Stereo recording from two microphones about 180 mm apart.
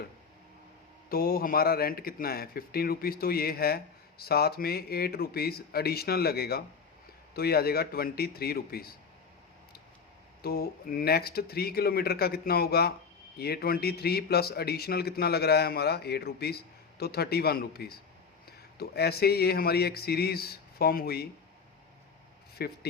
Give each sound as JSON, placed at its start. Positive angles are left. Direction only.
{"t": 1.1, "sound": "speech", "side_deg": 55}
{"t": 10.4, "sound": "speech", "side_deg": 60}
{"t": 22.5, "sound": "speech", "side_deg": 60}